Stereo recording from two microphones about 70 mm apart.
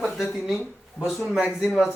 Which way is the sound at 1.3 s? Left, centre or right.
Centre.